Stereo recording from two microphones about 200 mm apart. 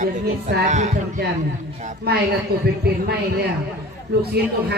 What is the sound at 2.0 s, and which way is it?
Speech, 50° right (ahead or behind).